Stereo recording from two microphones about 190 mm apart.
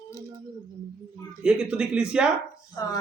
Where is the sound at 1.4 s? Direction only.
5° right (ahead or behind).